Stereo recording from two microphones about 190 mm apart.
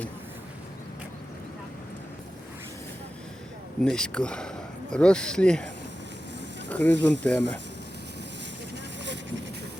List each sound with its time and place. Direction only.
3.8 s speech: 5° left (ahead or behind)
6.7 s a sound: 10° left (ahead or behind)
7.0 s speech: 10° left (ahead or behind)